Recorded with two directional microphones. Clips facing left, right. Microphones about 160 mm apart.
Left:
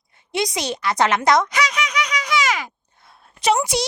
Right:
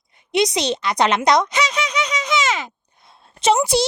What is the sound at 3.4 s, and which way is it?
Speech, 25° right (ahead or behind).